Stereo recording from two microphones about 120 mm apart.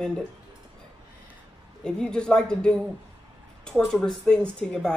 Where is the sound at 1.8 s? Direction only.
5° left (ahead or behind).